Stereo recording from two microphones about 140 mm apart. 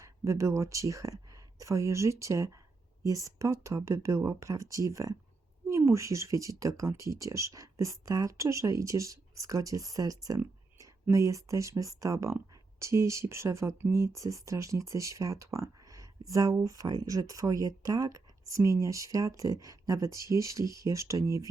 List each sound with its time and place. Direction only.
0.0 s speech: 20° right (ahead or behind)